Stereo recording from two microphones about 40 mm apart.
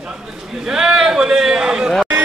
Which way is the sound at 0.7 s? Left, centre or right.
Centre.